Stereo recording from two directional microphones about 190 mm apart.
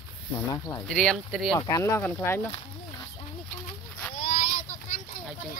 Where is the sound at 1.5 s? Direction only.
20° left (ahead or behind).